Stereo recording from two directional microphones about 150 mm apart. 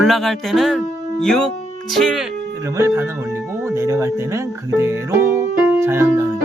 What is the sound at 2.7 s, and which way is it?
Speech, 15° right (ahead or behind).